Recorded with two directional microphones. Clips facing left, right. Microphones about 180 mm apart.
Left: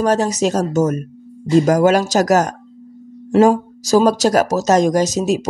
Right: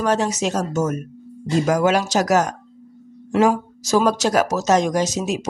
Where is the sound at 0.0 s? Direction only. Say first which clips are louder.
Left 4 dB; 40° left (ahead or behind).